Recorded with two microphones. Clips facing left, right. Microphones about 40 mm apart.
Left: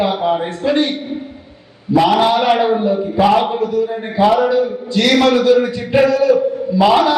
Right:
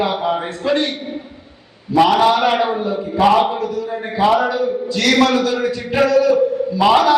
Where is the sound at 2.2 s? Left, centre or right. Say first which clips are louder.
Left 1 dB; centre.